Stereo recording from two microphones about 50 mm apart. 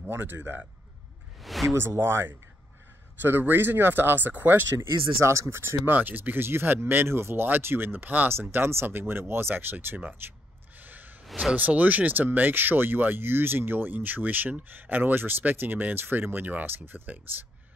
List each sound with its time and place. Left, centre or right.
0.1 s speech: right
1.4 s speech: centre
1.8 s speech: right
3.2 s speech: right
5.2 s speech: right
5.9 s speech: right
7.4 s speech: right
8.3 s speech: right
8.8 s speech: right
10.8 s sigh: right
11.5 s speech: right